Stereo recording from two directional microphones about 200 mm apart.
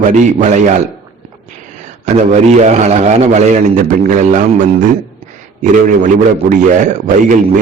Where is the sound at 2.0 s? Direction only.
35° right (ahead or behind).